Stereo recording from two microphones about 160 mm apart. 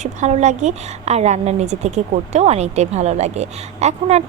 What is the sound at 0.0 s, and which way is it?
A woman's voice, 45° right (ahead or behind).